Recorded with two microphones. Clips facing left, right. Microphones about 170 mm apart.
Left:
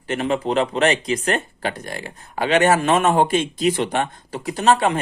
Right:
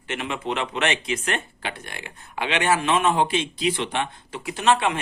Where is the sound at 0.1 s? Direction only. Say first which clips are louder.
Left 7 dB; 35° left (ahead or behind).